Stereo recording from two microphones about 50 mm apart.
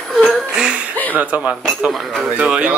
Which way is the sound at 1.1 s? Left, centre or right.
Right.